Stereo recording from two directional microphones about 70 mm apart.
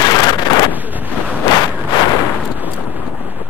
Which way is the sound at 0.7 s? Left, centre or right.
Right.